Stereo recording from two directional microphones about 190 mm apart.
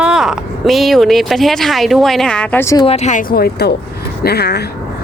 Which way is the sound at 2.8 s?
35° left (ahead or behind).